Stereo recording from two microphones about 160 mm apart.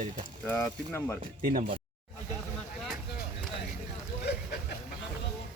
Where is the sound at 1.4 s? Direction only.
65° right (ahead or behind).